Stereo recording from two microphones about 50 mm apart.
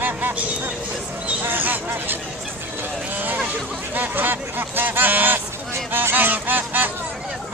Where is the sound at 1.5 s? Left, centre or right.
Right.